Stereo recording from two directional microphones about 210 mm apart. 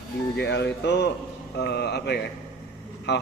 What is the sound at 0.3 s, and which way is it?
A man's voice, 55° left (ahead or behind).